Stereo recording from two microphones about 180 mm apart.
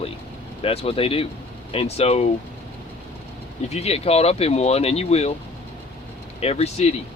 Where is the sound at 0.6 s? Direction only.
35° left (ahead or behind).